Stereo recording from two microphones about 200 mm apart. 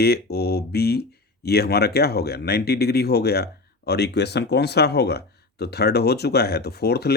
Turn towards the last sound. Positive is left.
turn(degrees=55)  # may be behind; listen again after turning